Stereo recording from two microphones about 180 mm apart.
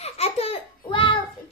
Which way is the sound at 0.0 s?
35° left (ahead or behind).